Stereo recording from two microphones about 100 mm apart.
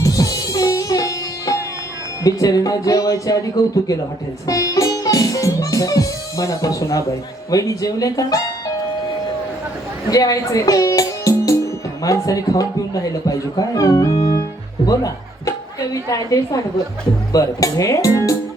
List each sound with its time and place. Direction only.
0.0 s sitar: 35° left (ahead or behind)
2.2 s speech: 35° left (ahead or behind)
4.4 s music: 35° left (ahead or behind)
10.1 s a woman's voice: 35° left (ahead or behind)